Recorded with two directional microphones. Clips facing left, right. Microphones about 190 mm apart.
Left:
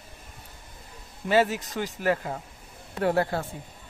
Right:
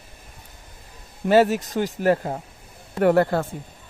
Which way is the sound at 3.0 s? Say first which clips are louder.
Right 7 dB; 55° right (ahead or behind).